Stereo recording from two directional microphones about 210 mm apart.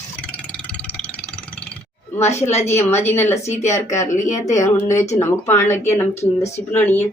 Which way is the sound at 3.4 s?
35° left (ahead or behind).